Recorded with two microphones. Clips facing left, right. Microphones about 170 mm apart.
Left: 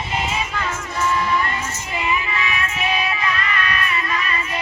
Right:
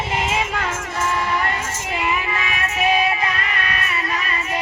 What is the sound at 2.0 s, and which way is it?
Music, 55° right (ahead or behind).